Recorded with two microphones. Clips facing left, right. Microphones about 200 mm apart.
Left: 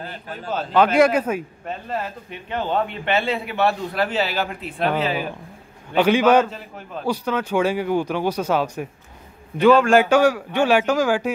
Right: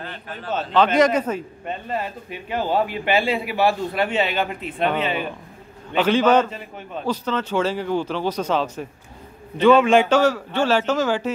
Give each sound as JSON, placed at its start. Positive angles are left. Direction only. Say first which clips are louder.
{"t": 0.0, "sound": "a man's voice", "louder": "left 1 dB", "side_deg": 40}
{"t": 0.5, "sound": "a man's voice", "louder": "left 1 dB", "side_deg": 0}
{"t": 10.0, "sound": "a man's voice", "louder": "left 1 dB", "side_deg": 10}